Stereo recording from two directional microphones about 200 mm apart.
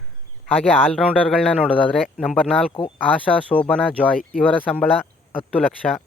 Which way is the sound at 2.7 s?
25° left (ahead or behind).